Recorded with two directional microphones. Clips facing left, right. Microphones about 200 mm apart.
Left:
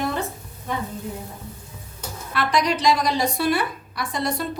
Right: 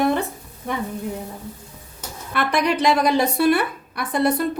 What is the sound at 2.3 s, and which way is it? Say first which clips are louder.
A woman's voice: right 2 dB; 60° right (ahead or behind).